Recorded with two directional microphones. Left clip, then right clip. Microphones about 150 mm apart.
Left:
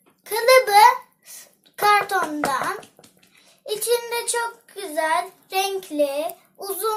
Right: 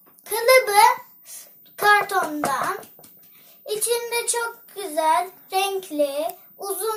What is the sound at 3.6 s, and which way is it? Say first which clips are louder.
A child's voice: left 2 dB; 15° left (ahead or behind).